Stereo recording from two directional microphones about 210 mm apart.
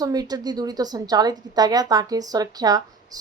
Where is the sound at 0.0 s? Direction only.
20° right (ahead or behind).